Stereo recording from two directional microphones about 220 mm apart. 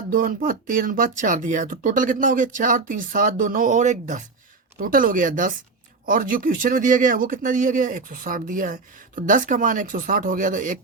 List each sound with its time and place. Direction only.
0.1 s speech: 40° right (ahead or behind)